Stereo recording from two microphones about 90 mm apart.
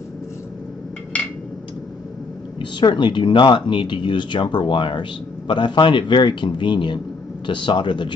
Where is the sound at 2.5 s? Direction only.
60° left (ahead or behind).